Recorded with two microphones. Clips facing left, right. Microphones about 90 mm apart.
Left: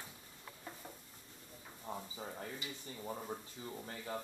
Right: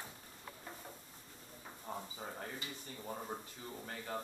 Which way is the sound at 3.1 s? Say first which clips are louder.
Right 1 dB; 15° right (ahead or behind).